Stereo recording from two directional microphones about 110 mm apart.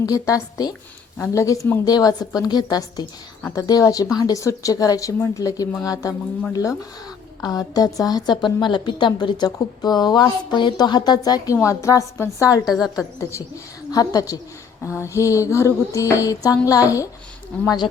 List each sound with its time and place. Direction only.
0.0 s a woman's voice: 30° left (ahead or behind)
11.6 s music: 25° left (ahead or behind)
12.6 s a woman's voice: 5° right (ahead or behind)
13.9 s a woman's voice: 35° left (ahead or behind)
14.8 s music: 25° left (ahead or behind)
16.6 s a woman's voice: 30° left (ahead or behind)